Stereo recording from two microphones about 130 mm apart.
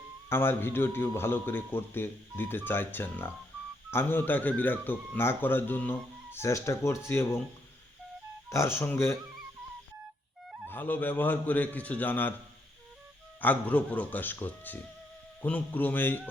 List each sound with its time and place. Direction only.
0.3 s a man's voice: 15° left (ahead or behind)
8.4 s speech: 20° left (ahead or behind)
10.7 s a man's voice: 15° left (ahead or behind)
13.4 s a man's voice: 10° left (ahead or behind)